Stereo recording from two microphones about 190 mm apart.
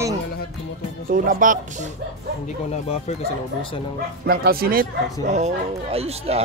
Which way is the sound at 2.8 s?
30° left (ahead or behind).